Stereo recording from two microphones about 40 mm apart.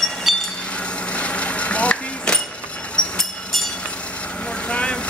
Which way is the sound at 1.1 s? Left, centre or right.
Left.